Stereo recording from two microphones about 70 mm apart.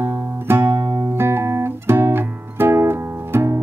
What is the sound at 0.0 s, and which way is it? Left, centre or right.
Music, right.